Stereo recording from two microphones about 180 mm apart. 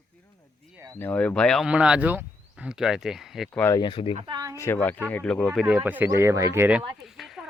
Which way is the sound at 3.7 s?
25° left (ahead or behind).